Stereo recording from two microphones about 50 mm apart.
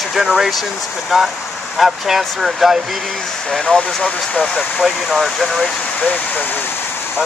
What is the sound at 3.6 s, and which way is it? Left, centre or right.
Speech, left.